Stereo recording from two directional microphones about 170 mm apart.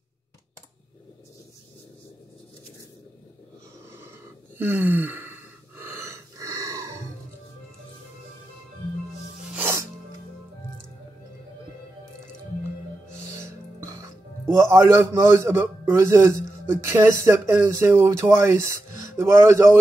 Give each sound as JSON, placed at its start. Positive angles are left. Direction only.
{"t": 4.6, "sound": "gasp", "side_deg": -10}
{"t": 9.5, "sound": "music", "side_deg": -15}
{"t": 13.1, "sound": "music", "side_deg": -15}
{"t": 16.6, "sound": "speech", "side_deg": -15}